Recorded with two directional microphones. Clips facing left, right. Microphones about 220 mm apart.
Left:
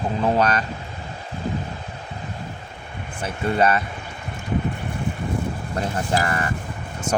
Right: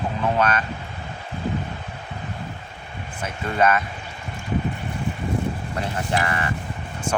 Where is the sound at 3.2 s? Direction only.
35° left (ahead or behind).